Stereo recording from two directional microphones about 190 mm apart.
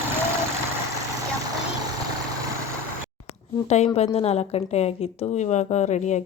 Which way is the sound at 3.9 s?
35° left (ahead or behind).